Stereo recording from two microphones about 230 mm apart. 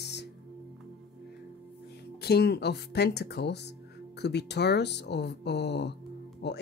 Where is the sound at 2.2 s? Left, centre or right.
Left.